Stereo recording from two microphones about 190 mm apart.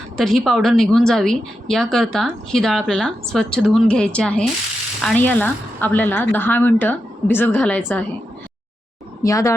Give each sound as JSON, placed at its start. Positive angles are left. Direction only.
{"t": 0.2, "sound": "a woman's voice", "side_deg": 0}
{"t": 9.2, "sound": "speech", "side_deg": 15}